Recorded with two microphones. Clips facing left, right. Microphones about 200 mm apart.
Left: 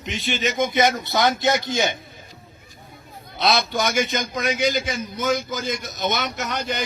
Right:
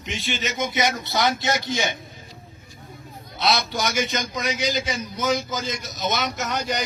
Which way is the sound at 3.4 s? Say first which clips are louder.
Left 2 dB; 55° left (ahead or behind).